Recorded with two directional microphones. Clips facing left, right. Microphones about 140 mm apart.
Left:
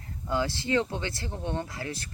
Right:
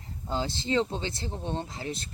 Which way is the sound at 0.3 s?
25° right (ahead or behind).